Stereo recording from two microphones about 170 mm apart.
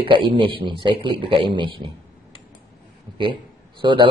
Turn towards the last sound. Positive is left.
turn(degrees=-30)  # may be behind; listen again after turning